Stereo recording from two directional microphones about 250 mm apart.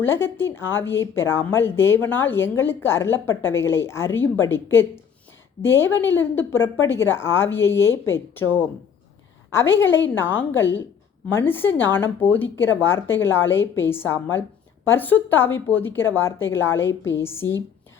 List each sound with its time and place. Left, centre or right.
0.0 s a woman's voice: centre